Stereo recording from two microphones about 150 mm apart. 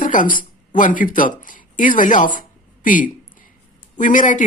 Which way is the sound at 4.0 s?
60° left (ahead or behind).